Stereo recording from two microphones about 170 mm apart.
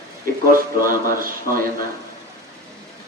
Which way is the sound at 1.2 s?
55° right (ahead or behind).